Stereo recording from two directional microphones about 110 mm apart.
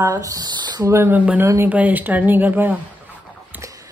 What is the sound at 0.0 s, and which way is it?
Speech, 30° right (ahead or behind).